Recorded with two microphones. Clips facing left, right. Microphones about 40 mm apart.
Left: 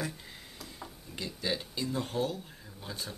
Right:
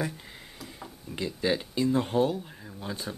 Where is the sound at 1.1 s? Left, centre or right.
Right.